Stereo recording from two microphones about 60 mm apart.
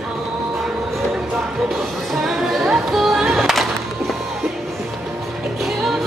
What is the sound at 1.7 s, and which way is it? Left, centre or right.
Music, centre.